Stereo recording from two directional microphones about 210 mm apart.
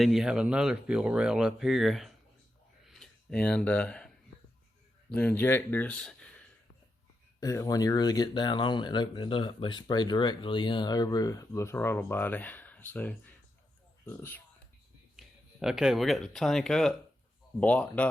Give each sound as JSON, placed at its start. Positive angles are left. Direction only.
{"t": 0.0, "sound": "speech", "side_deg": 0}
{"t": 2.9, "sound": "a sound", "side_deg": 5}
{"t": 5.1, "sound": "speech", "side_deg": 10}
{"t": 7.3, "sound": "speech", "side_deg": 15}
{"t": 15.1, "sound": "speech", "side_deg": 0}